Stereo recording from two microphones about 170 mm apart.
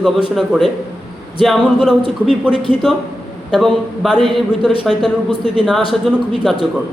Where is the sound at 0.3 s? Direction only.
Centre (ahead or behind).